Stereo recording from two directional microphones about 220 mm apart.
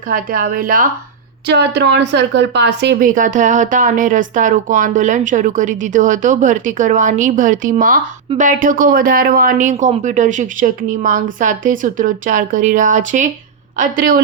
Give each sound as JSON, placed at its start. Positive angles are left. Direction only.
{"t": 0.1, "sound": "a woman's voice", "side_deg": -40}